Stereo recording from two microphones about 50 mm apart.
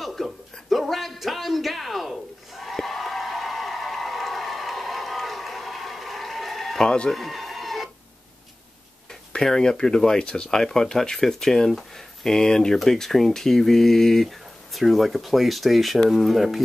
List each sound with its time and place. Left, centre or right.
0.0 s a sound: centre
7.1 s chicken: centre
9.3 s speech: centre